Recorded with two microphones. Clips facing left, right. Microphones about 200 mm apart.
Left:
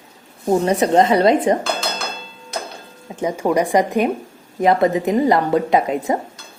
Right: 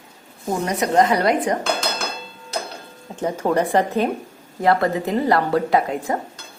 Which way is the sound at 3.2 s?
10° left (ahead or behind).